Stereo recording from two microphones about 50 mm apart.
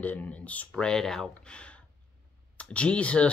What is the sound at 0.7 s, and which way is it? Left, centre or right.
Speech, centre.